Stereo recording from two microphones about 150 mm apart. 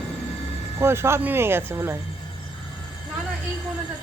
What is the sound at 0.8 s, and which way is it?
Speech, 15° right (ahead or behind).